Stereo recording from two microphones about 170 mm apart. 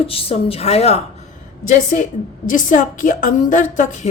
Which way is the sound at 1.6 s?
50° left (ahead or behind).